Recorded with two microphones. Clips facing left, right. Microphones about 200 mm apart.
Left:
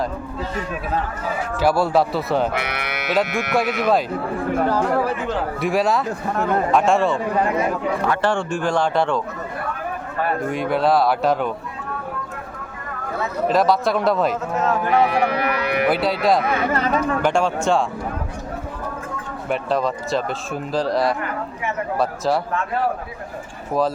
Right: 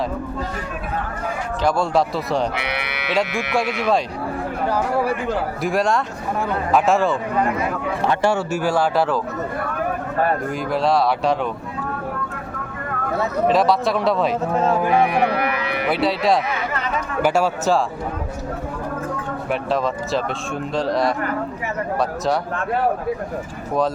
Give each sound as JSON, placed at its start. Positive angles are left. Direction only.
{"t": 1.6, "sound": "speech", "side_deg": 5}
{"t": 2.6, "sound": "speech", "side_deg": 45}
{"t": 3.5, "sound": "speech", "side_deg": 0}
{"t": 5.6, "sound": "speech", "side_deg": 0}
{"t": 8.2, "sound": "speech", "side_deg": -5}
{"t": 10.5, "sound": "speech", "side_deg": 0}
{"t": 13.5, "sound": "speech", "side_deg": 0}
{"t": 14.5, "sound": "speech", "side_deg": -30}
{"t": 14.8, "sound": "speech", "side_deg": -10}
{"t": 15.9, "sound": "speech", "side_deg": 0}
{"t": 16.7, "sound": "speech", "side_deg": 40}
{"t": 17.2, "sound": "speech", "side_deg": -5}
{"t": 19.5, "sound": "speech", "side_deg": 0}